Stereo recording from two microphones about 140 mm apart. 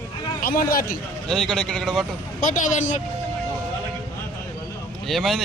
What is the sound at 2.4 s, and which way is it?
Speech, 65° left (ahead or behind).